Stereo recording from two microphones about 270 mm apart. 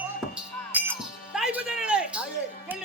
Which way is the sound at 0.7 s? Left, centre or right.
Centre.